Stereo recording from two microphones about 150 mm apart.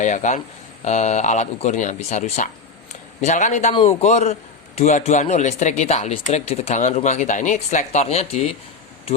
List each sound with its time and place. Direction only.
0.0 s a man's voice: 55° left (ahead or behind)